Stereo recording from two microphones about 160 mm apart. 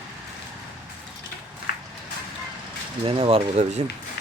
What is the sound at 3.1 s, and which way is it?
Speech, 35° right (ahead or behind).